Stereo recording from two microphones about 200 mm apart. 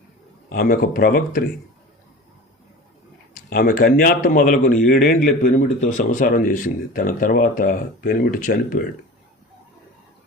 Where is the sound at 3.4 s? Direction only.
45° left (ahead or behind).